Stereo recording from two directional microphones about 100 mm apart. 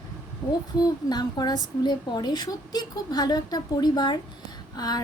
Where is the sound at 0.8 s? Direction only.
45° left (ahead or behind).